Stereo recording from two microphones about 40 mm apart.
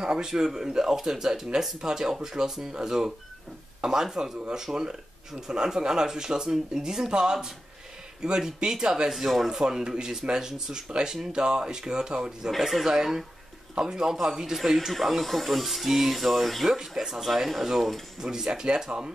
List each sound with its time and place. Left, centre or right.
0.0 s speech: centre
9.1 s speech: centre
9.5 s speech: centre
12.4 s speech: centre
16.7 s speech: centre
18.2 s speech: centre